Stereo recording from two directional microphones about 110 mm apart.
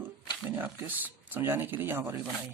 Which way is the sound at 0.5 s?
20° right (ahead or behind).